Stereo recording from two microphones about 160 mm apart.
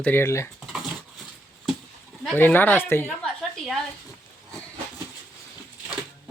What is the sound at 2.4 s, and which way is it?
Speech, 10° left (ahead or behind).